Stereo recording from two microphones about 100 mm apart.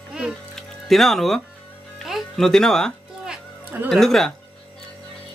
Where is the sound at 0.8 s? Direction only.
Centre (ahead or behind).